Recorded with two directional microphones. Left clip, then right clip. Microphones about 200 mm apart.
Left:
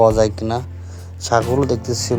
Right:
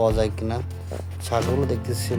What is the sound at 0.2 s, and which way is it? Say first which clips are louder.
Speech: left 8 dB; 25° left (ahead or behind).